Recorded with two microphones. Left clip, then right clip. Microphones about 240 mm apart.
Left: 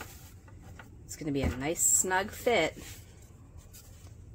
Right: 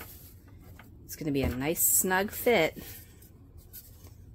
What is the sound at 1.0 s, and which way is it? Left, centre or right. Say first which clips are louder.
Speech: right 2 dB; right.